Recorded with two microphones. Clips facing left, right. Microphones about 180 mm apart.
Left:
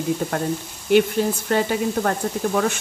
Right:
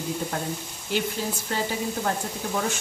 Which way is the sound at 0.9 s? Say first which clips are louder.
Left 10 dB; 60° left (ahead or behind).